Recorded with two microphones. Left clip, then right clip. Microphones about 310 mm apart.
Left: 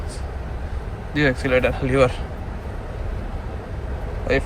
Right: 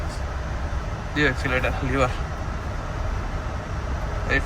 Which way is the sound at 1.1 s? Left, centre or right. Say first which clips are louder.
Left 4 dB; left.